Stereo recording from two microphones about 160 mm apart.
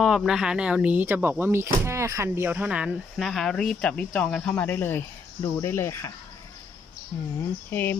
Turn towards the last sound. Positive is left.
turn(degrees=15)  # may be behind; listen again after turning